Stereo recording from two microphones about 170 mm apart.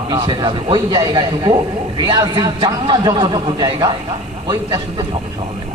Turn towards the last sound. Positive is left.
turn(degrees=-25)  # may be behind; listen again after turning